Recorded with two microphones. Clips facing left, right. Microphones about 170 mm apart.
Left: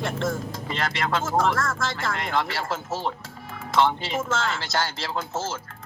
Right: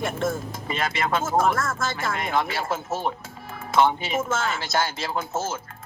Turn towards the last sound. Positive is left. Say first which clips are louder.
# right 2 dB
turn(degrees=-20)  # may be behind; listen again after turning